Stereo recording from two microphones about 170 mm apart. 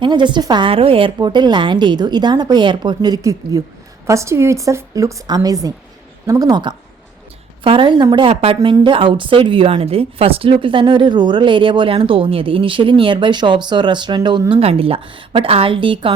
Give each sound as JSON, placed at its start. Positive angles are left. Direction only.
{"t": 0.0, "sound": "a woman's voice", "side_deg": -25}